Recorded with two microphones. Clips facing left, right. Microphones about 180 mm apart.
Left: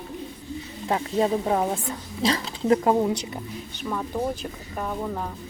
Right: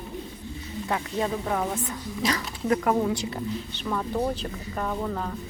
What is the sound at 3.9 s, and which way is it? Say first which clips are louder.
Speech: right 1 dB; 5° left (ahead or behind).